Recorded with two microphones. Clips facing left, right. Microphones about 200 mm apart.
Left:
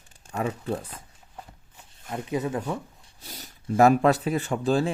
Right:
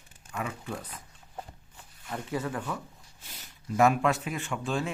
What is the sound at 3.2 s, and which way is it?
Speech, 40° left (ahead or behind).